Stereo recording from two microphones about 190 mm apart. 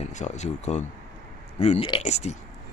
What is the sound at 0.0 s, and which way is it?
Speech, 40° left (ahead or behind).